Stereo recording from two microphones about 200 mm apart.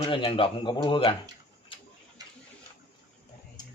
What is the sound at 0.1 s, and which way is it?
Speech, 25° left (ahead or behind).